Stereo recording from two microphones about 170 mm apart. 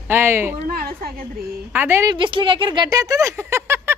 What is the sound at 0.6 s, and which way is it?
Speech, 60° right (ahead or behind).